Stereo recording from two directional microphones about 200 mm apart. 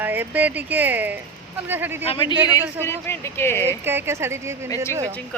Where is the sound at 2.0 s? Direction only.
30° left (ahead or behind).